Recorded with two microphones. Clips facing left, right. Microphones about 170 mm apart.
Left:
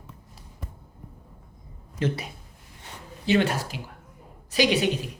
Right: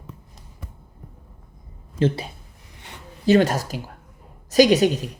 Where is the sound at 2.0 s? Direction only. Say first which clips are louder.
Right 6 dB; 30° right (ahead or behind).